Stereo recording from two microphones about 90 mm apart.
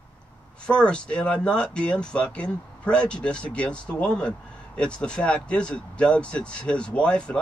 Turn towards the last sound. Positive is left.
turn(degrees=10)  # may be behind; listen again after turning